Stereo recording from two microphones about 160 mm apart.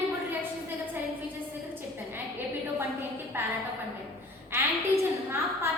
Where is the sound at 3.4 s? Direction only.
15° right (ahead or behind).